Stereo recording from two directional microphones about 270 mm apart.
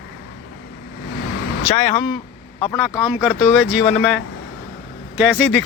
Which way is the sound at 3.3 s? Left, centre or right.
Centre.